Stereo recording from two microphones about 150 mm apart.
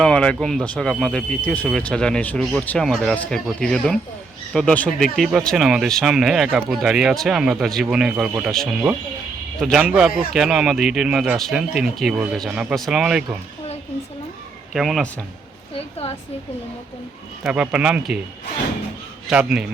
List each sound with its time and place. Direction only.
0.0 s speech: 5° left (ahead or behind)
14.7 s a man's voice: centre (ahead or behind)
15.7 s a woman's voice: 40° left (ahead or behind)
17.4 s speech: 5° right (ahead or behind)
19.3 s speech: 5° right (ahead or behind)